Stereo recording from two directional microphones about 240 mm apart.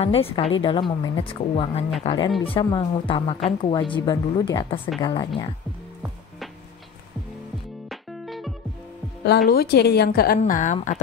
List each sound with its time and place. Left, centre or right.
0.0 s a woman's voice: left
7.9 s music: centre
9.5 s a woman's voice: left